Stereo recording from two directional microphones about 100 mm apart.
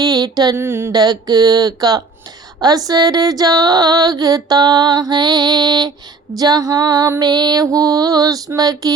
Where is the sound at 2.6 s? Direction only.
40° right (ahead or behind).